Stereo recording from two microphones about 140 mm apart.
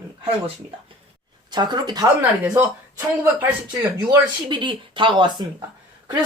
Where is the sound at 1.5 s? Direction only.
30° right (ahead or behind).